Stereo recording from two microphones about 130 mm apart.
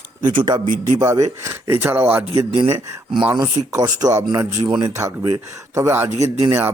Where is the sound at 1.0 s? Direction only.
25° right (ahead or behind).